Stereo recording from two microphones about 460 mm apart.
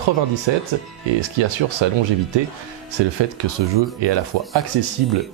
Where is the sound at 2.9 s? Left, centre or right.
Right.